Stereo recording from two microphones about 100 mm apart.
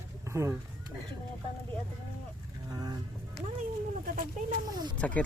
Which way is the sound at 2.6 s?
35° right (ahead or behind).